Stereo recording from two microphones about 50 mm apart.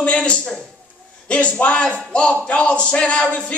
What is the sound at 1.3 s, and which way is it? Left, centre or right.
Speech, left.